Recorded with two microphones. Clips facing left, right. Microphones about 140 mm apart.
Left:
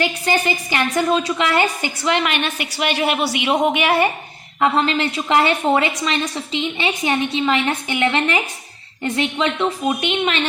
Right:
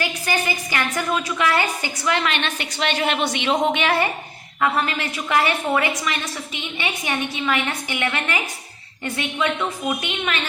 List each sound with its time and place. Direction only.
0.0 s a woman's voice: 20° left (ahead or behind)